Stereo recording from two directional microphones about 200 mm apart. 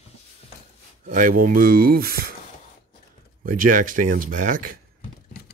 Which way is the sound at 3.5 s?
40° right (ahead or behind).